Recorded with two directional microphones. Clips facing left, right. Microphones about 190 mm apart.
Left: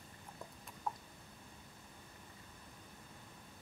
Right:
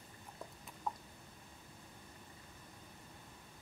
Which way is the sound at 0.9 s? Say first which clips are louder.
Even; centre (ahead or behind).